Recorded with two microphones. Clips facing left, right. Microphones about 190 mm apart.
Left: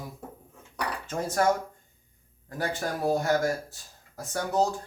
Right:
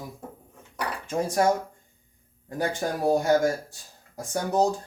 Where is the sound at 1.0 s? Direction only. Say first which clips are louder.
Right 4 dB; 10° right (ahead or behind).